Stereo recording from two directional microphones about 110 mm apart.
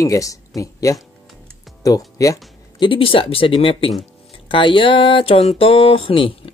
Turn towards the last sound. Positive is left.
turn(degrees=55)  # may be behind; listen again after turning